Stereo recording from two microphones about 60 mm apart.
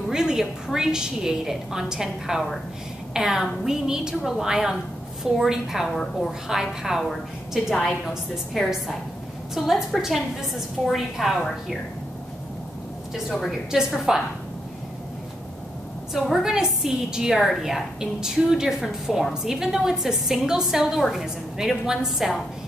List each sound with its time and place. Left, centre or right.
0.1 s a woman's voice: centre
5.9 s a woman's voice: centre
6.5 s a woman's voice: centre
13.5 s a woman's voice: centre
16.1 s a woman's voice: centre